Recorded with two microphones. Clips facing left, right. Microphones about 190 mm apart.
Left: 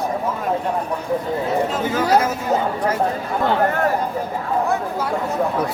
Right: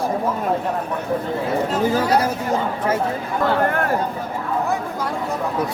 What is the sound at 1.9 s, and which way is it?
Speech, 35° right (ahead or behind).